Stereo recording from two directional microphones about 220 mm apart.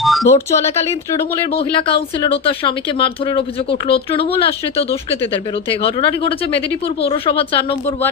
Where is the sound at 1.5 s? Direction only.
25° left (ahead or behind).